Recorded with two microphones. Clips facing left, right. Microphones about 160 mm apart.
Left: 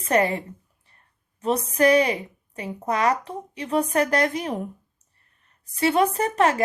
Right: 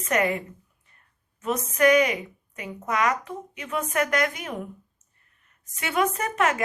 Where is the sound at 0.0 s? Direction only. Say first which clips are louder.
Left 3 dB; 30° left (ahead or behind).